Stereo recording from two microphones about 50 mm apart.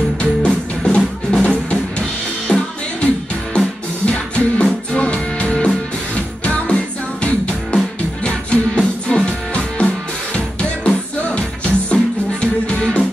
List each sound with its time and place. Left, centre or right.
0.2 s music: centre